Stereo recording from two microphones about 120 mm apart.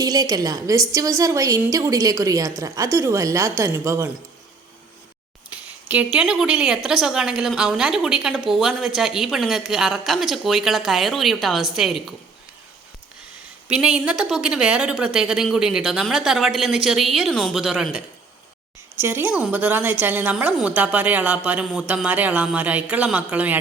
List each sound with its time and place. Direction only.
0.0 s a woman's voice: 30° right (ahead or behind)
5.5 s a woman's voice: 10° right (ahead or behind)
13.7 s a woman's voice: 10° right (ahead or behind)
18.9 s speech: 20° right (ahead or behind)